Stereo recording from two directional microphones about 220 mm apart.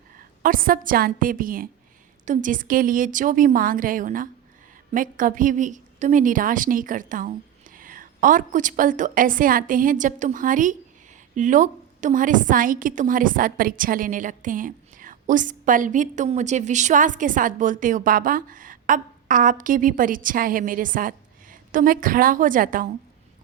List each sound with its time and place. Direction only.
0.4 s a woman's voice: 40° right (ahead or behind)